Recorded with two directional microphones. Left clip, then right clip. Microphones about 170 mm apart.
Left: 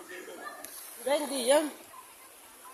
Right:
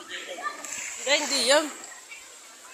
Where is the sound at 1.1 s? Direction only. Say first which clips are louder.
Right 4 dB; 20° left (ahead or behind).